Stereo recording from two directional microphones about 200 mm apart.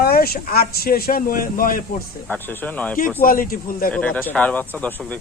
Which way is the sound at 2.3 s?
5° left (ahead or behind).